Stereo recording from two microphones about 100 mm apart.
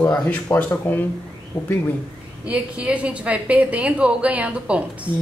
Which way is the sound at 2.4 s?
10° right (ahead or behind).